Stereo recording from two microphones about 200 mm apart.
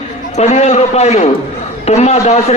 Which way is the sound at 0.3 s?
35° left (ahead or behind).